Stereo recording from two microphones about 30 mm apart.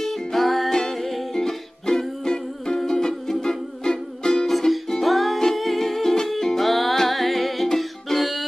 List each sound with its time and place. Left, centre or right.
0.0 s music: centre
0.7 s music: centre
0.9 s music: centre
1.3 s music: centre
4.5 s music: centre
5.4 s humming: centre
6.2 s music: centre